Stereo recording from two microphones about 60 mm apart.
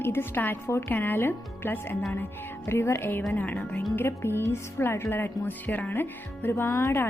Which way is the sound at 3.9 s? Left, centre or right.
Left.